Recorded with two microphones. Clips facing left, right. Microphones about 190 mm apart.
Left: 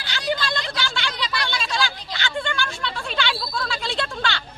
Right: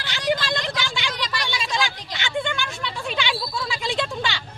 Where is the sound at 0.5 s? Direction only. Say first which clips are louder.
Right 1 dB; 15° right (ahead or behind).